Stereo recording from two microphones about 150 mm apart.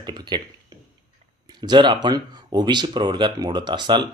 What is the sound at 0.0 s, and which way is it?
Speech, 30° right (ahead or behind).